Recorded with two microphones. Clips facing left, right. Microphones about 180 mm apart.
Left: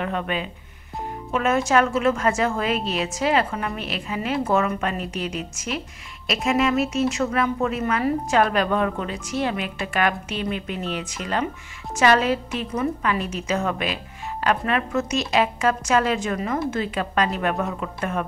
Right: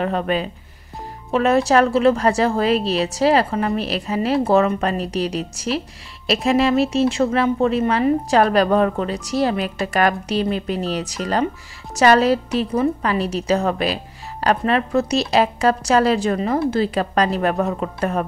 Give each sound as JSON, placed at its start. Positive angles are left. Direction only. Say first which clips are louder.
{"t": 0.0, "sound": "speech", "louder": "right 5 dB", "side_deg": -35}